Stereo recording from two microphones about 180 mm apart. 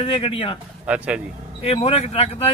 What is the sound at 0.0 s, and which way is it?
Speech, 30° left (ahead or behind).